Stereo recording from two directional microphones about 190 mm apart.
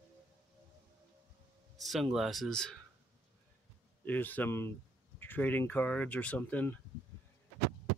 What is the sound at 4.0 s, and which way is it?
Speech, 10° left (ahead or behind).